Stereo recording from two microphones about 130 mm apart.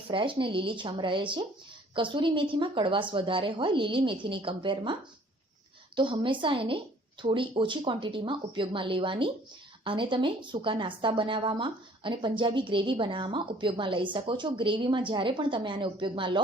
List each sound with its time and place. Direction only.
0.1 s a woman's voice: 40° right (ahead or behind)
6.0 s a woman's voice: 40° right (ahead or behind)